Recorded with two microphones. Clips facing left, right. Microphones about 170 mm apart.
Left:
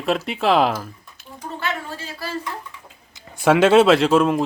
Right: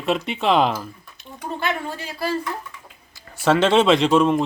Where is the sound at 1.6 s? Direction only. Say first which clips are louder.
Right 2 dB; 15° right (ahead or behind).